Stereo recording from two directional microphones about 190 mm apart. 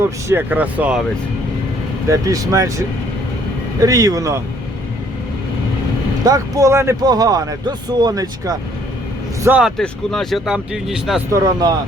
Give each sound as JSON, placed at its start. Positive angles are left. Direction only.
{"t": 0.3, "sound": "speech", "side_deg": -10}
{"t": 2.0, "sound": "speech", "side_deg": -20}
{"t": 6.2, "sound": "speech", "side_deg": -20}
{"t": 9.4, "sound": "speech", "side_deg": -5}
{"t": 11.3, "sound": "speech", "side_deg": -20}